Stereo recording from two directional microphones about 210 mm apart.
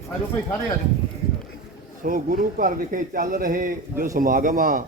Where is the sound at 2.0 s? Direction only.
45° right (ahead or behind).